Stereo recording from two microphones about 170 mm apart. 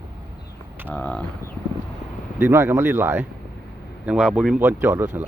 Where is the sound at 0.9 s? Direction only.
5° left (ahead or behind).